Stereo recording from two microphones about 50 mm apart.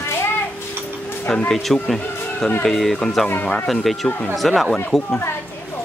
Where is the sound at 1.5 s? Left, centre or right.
Centre.